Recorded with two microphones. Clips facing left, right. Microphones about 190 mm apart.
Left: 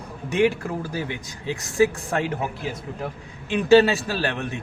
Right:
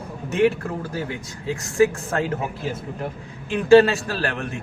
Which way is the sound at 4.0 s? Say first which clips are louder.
Left 1 dB; 5° left (ahead or behind).